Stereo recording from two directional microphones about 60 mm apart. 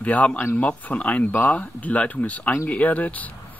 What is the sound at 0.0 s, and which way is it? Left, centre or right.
Speech, left.